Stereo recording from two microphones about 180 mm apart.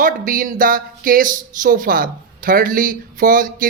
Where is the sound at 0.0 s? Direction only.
50° right (ahead or behind).